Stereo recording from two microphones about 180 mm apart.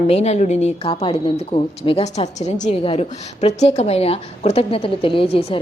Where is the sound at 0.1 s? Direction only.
35° left (ahead or behind).